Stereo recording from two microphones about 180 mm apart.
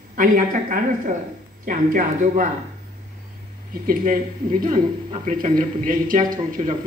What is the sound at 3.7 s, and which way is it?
Speech, 50° right (ahead or behind).